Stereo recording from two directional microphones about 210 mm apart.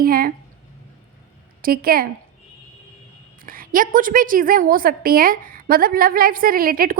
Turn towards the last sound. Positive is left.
turn(degrees=-45)  # may be behind; listen again after turning